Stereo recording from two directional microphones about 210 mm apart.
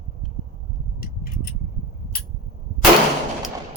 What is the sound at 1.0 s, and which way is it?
Tick-tock, 45° left (ahead or behind).